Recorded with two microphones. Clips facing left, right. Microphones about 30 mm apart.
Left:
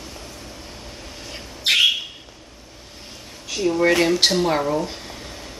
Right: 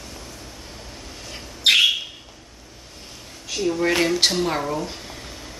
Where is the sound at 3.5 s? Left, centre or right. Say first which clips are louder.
Left 3 dB; centre.